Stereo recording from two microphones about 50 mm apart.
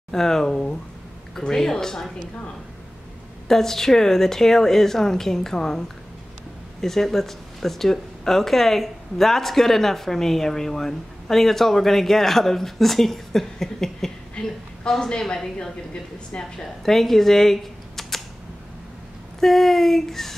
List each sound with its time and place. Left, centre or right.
0.1 s a woman's voice: centre
3.4 s a woman's voice: centre
14.3 s a sound: left
14.9 s a woman's voice: centre
19.4 s a woman's voice: centre